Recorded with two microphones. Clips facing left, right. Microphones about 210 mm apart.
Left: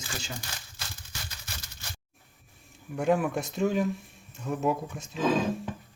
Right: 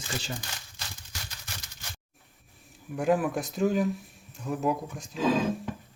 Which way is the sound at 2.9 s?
Centre (ahead or behind).